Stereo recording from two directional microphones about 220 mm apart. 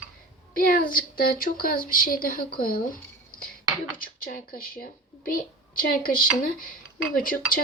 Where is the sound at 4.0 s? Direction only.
40° left (ahead or behind).